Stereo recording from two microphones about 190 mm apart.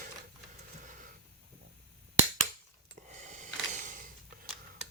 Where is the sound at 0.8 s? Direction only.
40° right (ahead or behind).